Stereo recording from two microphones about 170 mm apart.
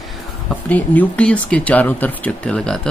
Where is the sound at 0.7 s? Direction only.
10° left (ahead or behind).